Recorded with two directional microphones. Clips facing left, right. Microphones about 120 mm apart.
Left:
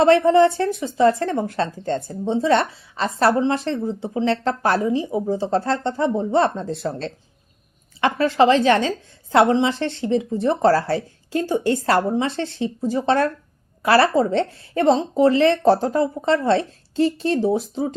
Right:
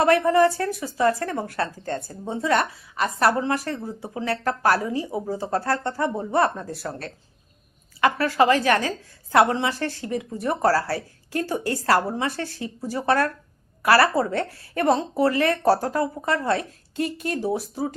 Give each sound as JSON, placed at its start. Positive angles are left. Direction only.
{"t": 0.0, "sound": "speech", "side_deg": 25}